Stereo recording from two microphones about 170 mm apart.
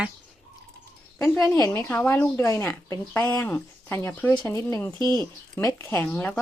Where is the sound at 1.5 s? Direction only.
15° left (ahead or behind).